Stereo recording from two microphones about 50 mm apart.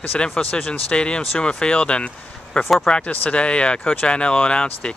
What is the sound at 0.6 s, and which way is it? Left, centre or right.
Speech, left.